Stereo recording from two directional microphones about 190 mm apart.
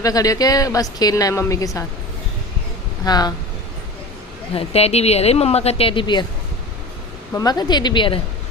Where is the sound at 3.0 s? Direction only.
20° left (ahead or behind).